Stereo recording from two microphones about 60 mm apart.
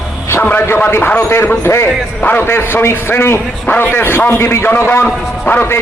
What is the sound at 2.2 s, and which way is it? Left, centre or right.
A man's voice, left.